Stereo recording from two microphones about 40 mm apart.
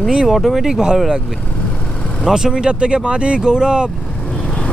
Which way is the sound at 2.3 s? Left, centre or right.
Centre.